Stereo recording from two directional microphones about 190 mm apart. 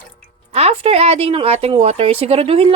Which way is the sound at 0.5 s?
35° right (ahead or behind).